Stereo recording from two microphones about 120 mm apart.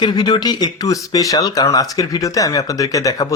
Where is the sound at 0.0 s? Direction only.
35° left (ahead or behind).